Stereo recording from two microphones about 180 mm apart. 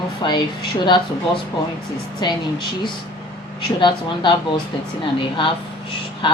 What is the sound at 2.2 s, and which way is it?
Speech, 25° left (ahead or behind).